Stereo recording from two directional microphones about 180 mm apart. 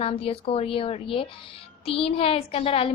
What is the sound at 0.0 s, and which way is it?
A woman's voice, 30° left (ahead or behind).